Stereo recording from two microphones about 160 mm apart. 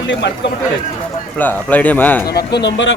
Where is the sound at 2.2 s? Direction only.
90° left.